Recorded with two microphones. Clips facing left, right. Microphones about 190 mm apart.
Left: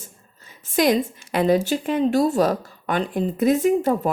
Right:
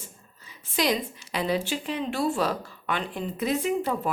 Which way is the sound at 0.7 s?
50° left (ahead or behind).